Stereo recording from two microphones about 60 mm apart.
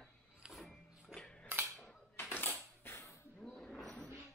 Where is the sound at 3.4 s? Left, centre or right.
Centre.